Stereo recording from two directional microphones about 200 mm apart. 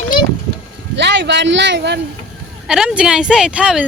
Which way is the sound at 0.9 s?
60° right (ahead or behind).